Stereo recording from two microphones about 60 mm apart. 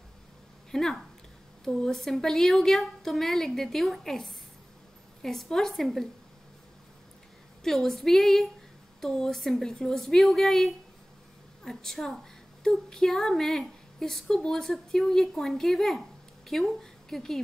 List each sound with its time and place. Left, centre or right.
0.7 s a woman's voice: centre
7.6 s a woman's voice: centre